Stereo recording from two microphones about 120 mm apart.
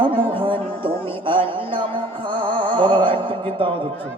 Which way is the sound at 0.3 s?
45° right (ahead or behind).